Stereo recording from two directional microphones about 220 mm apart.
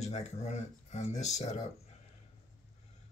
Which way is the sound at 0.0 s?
30° left (ahead or behind).